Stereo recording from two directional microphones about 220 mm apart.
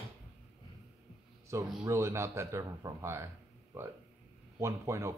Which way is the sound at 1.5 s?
10° right (ahead or behind).